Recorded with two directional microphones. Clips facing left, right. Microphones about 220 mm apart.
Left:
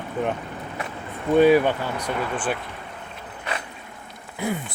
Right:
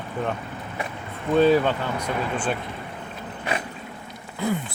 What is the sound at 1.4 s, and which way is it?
Speech, 15° left (ahead or behind).